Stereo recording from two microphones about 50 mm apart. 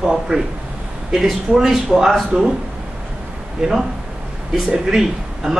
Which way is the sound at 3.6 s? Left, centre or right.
Centre.